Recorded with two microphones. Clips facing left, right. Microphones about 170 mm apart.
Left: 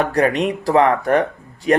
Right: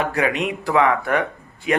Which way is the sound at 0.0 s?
40° left (ahead or behind).